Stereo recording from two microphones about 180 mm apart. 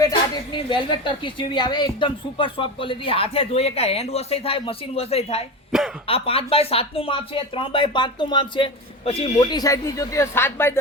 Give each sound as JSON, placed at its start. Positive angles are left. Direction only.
{"t": 0.0, "sound": "a woman's voice", "side_deg": 25}